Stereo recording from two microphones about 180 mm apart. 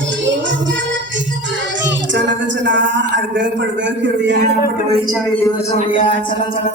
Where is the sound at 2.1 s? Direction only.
90° right.